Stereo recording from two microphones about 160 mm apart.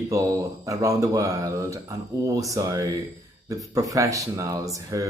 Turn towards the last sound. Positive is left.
turn(degrees=-20)  # may be behind; listen again after turning